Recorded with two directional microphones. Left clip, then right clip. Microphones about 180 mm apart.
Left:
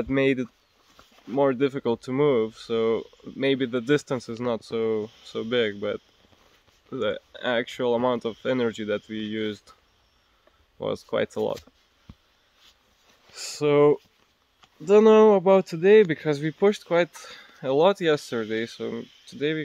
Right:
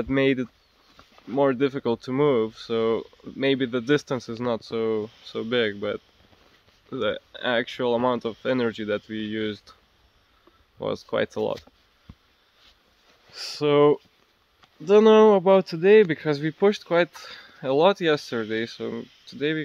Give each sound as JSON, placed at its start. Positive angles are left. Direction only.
{"t": 0.0, "sound": "speech", "side_deg": 5}
{"t": 10.8, "sound": "speech", "side_deg": 5}
{"t": 12.1, "sound": "a sound", "side_deg": 45}
{"t": 13.3, "sound": "speech", "side_deg": 10}